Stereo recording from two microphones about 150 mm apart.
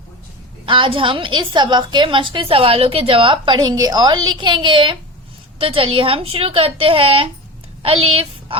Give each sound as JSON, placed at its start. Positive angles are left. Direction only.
{"t": 0.6, "sound": "a woman's voice", "side_deg": -35}